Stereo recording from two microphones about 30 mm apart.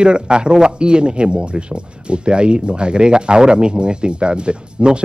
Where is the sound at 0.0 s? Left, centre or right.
Right.